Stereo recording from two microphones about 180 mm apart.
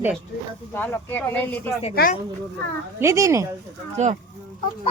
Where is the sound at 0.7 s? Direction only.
10° left (ahead or behind).